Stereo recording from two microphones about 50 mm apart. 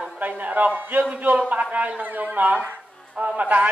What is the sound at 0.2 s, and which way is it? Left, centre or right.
A man's voice, right.